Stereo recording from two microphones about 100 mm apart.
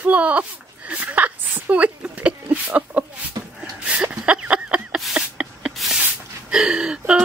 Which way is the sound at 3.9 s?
10° right (ahead or behind).